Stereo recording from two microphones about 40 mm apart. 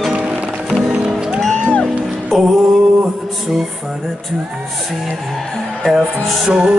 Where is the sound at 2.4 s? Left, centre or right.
Centre.